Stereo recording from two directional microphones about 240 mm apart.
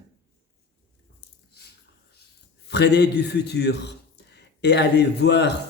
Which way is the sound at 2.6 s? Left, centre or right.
Left.